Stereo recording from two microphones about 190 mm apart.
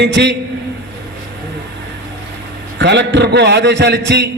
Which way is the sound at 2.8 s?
65° right (ahead or behind).